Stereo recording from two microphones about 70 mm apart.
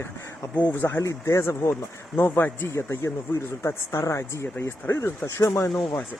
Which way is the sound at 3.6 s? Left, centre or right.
Left.